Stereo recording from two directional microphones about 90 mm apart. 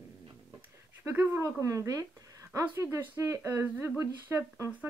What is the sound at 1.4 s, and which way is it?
Speech, 35° right (ahead or behind).